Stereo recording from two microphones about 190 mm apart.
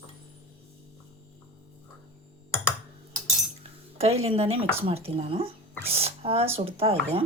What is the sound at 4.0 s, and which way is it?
Speech, 30° right (ahead or behind).